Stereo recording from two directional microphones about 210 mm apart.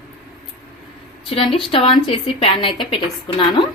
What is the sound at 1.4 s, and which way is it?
A woman's voice, 25° left (ahead or behind).